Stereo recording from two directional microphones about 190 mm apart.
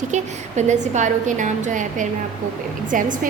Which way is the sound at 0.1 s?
40° right (ahead or behind).